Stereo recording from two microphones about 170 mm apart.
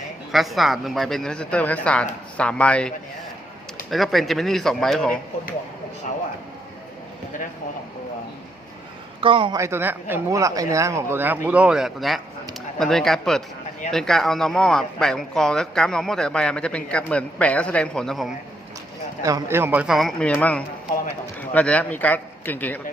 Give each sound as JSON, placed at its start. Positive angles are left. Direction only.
{"t": 0.3, "sound": "a man's voice", "side_deg": 0}
{"t": 9.2, "sound": "a man's voice", "side_deg": -30}
{"t": 9.6, "sound": "speech", "side_deg": -15}
{"t": 19.2, "sound": "a man's voice", "side_deg": -15}